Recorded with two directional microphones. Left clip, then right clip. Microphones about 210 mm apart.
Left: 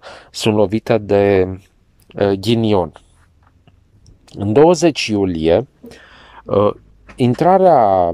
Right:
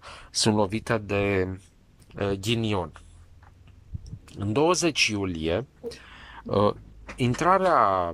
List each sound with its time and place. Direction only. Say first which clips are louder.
0.0 s a sound: left 6 dB; 30° left (ahead or behind)
0.4 s speech: left 9 dB; 15° left (ahead or behind)
0.7 s speech: left 12 dB; 30° left (ahead or behind)
2.1 s speech: left 12 dB; 35° left (ahead or behind)
4.0 s speech: left 11 dB; 35° left (ahead or behind); by 6.8 s 10° left (ahead or behind)
7.2 s speech: left 10 dB; 30° left (ahead or behind)